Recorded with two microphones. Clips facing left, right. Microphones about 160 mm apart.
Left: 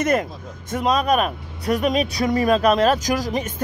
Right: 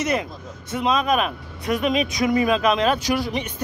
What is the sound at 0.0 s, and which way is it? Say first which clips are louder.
Speech: left 3 dB; 50° left (ahead or behind).